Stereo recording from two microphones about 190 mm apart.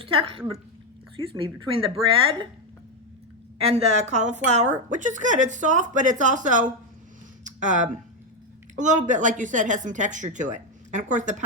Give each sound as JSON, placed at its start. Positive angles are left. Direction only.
{"t": 0.0, "sound": "speech", "side_deg": -30}
{"t": 3.6, "sound": "speech", "side_deg": -30}